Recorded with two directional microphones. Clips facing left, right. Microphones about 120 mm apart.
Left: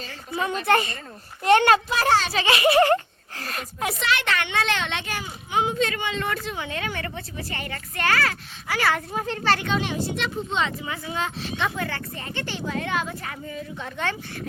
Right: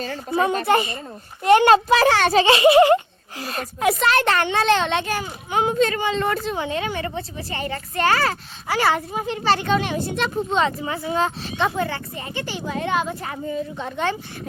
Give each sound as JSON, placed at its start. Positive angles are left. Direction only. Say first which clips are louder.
{"t": 0.0, "sound": "speech", "louder": "right 7 dB", "side_deg": -40}
{"t": 0.6, "sound": "a child's voice", "louder": "right 2 dB", "side_deg": -10}
{"t": 1.9, "sound": "a child's voice", "louder": "right 5 dB", "side_deg": -90}
{"t": 2.3, "sound": "giggle", "louder": "right 6 dB", "side_deg": -30}
{"t": 4.0, "sound": "speech", "louder": "right 4 dB", "side_deg": -40}
{"t": 5.9, "sound": "a woman's voice", "louder": "right 6 dB", "side_deg": -35}
{"t": 9.1, "sound": "a child's voice", "louder": "right 2 dB", "side_deg": -10}
{"t": 9.6, "sound": "speech", "louder": "right 4 dB", "side_deg": -55}
{"t": 11.9, "sound": "a woman's voice", "louder": "right 3 dB", "side_deg": -15}